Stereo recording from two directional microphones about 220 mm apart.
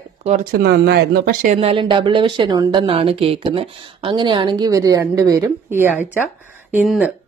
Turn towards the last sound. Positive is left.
turn(degrees=-5)  # may be behind; listen again after turning